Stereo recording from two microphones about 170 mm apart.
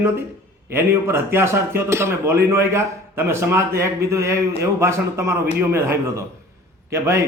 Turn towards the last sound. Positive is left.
turn(degrees=-15)  # may be behind; listen again after turning